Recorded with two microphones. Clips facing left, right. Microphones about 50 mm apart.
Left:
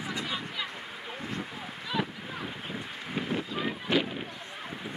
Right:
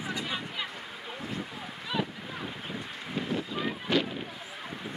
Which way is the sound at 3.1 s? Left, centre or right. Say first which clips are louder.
Even; centre.